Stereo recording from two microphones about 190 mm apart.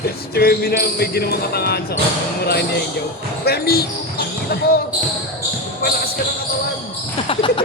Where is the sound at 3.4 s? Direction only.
55° left (ahead or behind).